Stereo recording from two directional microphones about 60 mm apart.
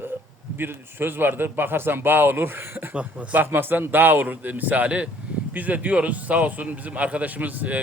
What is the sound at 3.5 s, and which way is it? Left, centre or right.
A man's voice, right.